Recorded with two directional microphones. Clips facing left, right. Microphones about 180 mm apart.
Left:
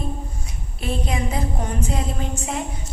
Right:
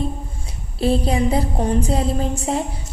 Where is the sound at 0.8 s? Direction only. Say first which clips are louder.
Right 8 dB; 35° right (ahead or behind).